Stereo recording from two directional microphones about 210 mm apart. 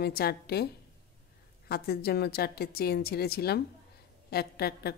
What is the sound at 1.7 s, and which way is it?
A woman's voice, 50° left (ahead or behind).